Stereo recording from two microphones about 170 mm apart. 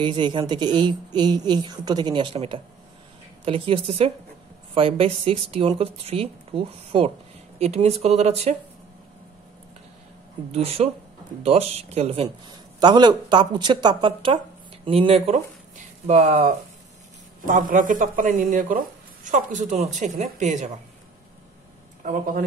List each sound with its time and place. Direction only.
0.0 s a woman's voice: 30° right (ahead or behind)
10.5 s speech: 35° right (ahead or behind)
12.4 s a woman's voice: 25° right (ahead or behind); by 20.8 s 45° right (ahead or behind)
22.0 s speech: 55° right (ahead or behind)